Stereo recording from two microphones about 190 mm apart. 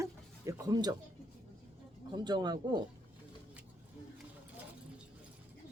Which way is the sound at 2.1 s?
20° right (ahead or behind).